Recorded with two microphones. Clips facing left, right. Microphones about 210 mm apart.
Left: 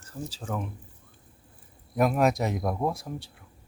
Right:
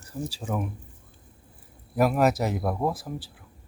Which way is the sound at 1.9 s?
Centre (ahead or behind).